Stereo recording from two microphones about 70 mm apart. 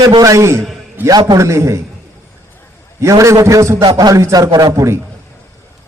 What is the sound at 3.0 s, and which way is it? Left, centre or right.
Speech, right.